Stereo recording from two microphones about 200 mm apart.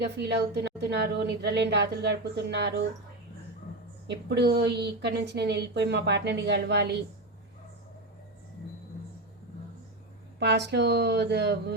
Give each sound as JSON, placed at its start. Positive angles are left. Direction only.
{"t": 0.0, "sound": "a woman's voice", "side_deg": -55}
{"t": 4.0, "sound": "a woman's voice", "side_deg": -55}
{"t": 10.4, "sound": "a woman's voice", "side_deg": -60}